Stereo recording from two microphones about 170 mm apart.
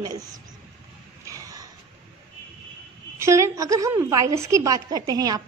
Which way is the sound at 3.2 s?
15° right (ahead or behind).